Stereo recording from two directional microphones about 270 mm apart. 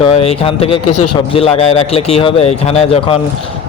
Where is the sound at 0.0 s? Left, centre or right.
Left.